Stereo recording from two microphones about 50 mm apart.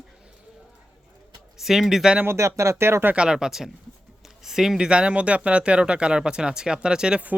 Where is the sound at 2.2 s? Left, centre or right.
Right.